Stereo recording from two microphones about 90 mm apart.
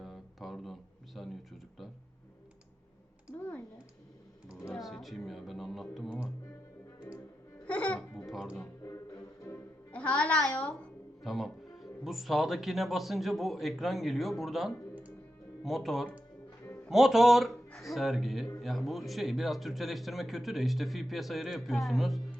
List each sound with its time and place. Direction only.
0.0 s a sound: centre (ahead or behind)
3.3 s a sound: 15° left (ahead or behind)
4.8 s music: centre (ahead or behind)
7.6 s music: 15° left (ahead or behind)
8.3 s music: centre (ahead or behind)
8.8 s music: 40° left (ahead or behind)
9.9 s music: 15° left (ahead or behind)
11.2 s speech: centre (ahead or behind)
16.6 s music: 25° left (ahead or behind)
16.9 s speech: 5° right (ahead or behind)